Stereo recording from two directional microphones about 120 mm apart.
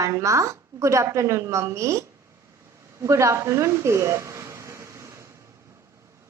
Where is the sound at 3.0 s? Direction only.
25° right (ahead or behind).